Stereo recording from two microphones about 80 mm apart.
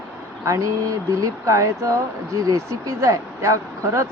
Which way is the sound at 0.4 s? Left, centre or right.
Right.